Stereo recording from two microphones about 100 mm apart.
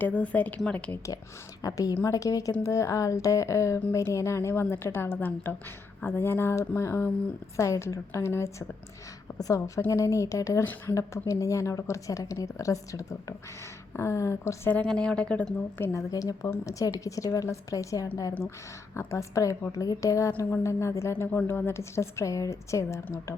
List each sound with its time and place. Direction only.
0.0 s a woman's voice: 15° left (ahead or behind)
1.6 s a woman's voice: 35° left (ahead or behind)
14.8 s a woman's voice: 10° left (ahead or behind)
15.8 s a woman's voice: 30° left (ahead or behind)